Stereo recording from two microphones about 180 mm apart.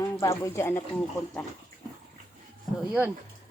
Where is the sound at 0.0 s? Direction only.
15° left (ahead or behind).